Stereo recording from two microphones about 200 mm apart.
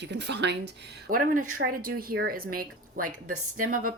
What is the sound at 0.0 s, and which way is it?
A woman's voice, 60° right (ahead or behind).